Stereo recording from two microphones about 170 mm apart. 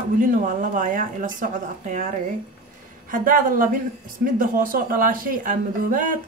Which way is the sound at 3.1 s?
50° right (ahead or behind).